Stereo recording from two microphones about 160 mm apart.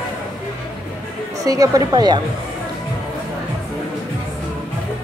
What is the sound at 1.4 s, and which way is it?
Speech, 20° right (ahead or behind).